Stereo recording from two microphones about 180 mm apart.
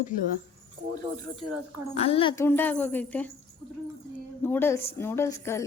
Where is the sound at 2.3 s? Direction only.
15° left (ahead or behind).